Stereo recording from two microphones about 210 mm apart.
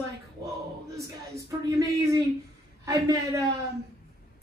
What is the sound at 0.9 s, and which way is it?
Speech, 15° right (ahead or behind).